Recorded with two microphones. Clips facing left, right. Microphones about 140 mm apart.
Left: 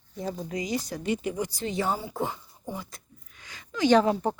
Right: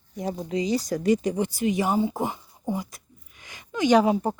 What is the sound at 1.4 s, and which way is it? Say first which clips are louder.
Speech: right 4 dB; 15° right (ahead or behind).